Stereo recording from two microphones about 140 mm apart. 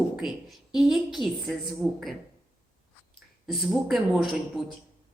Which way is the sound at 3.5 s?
Centre (ahead or behind).